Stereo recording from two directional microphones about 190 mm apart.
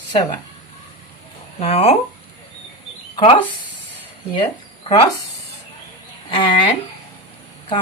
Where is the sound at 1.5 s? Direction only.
30° left (ahead or behind).